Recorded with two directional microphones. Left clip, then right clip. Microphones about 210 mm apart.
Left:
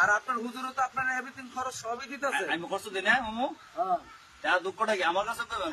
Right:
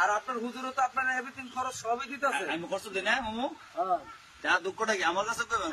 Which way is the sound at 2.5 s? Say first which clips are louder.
Left 1 dB; 10° left (ahead or behind).